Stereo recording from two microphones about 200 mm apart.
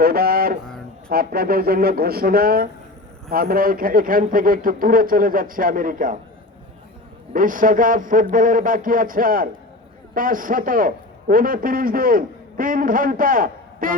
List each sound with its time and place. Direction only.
0.0 s a man's voice: 50° right (ahead or behind)
7.3 s a man's voice: 45° right (ahead or behind)